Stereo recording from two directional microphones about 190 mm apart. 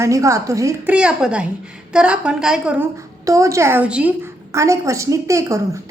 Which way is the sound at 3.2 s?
15° right (ahead or behind).